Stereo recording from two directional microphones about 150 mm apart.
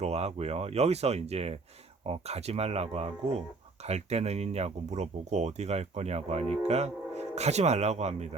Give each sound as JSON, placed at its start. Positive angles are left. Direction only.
{"t": 0.0, "sound": "speech", "side_deg": -45}